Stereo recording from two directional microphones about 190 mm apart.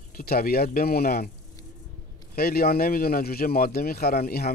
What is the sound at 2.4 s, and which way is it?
A man's voice, 55° left (ahead or behind).